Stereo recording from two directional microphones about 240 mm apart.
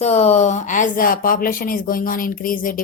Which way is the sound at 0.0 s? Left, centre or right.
Left.